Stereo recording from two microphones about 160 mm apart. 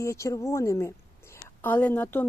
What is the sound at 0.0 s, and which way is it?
A woman's voice, 20° left (ahead or behind).